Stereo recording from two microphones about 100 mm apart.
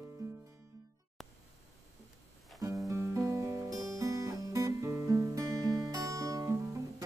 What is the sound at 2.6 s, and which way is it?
Music, 30° right (ahead or behind).